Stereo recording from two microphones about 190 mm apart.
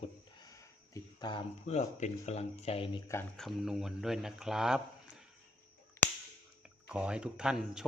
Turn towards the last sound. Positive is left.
turn(degrees=-5)  # may be behind; listen again after turning